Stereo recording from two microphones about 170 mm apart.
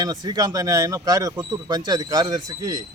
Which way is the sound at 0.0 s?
20° right (ahead or behind).